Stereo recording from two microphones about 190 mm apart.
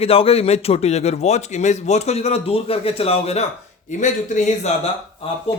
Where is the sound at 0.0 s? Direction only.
30° left (ahead or behind).